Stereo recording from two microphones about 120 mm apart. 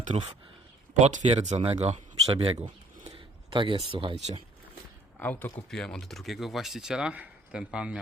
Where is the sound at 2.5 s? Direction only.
40° right (ahead or behind).